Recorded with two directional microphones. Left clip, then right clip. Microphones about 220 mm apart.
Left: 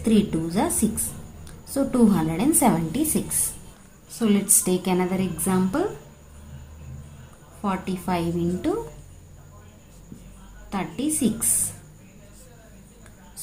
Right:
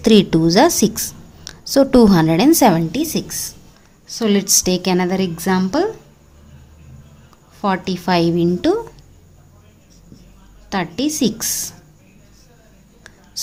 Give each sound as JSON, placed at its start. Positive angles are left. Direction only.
{"t": 0.0, "sound": "a woman's voice", "side_deg": -45}
{"t": 7.6, "sound": "a woman's voice", "side_deg": -45}
{"t": 10.7, "sound": "a woman's voice", "side_deg": -40}